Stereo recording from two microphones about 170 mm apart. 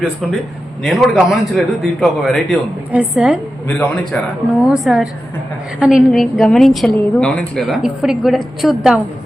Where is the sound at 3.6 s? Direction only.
5° left (ahead or behind).